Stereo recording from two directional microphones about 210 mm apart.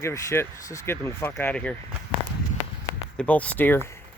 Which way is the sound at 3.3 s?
5° left (ahead or behind).